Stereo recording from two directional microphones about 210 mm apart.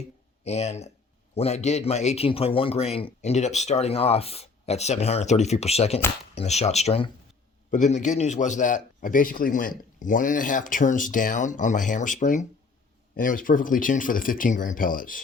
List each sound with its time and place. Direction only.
0.4 s a man's voice: 30° left (ahead or behind)